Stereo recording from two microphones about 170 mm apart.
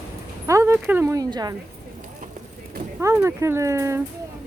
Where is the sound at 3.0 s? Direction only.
15° right (ahead or behind).